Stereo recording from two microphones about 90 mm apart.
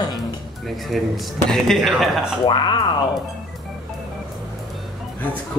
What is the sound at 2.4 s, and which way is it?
Speech, 60° left (ahead or behind).